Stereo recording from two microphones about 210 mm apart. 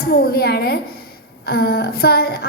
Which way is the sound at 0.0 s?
45° left (ahead or behind).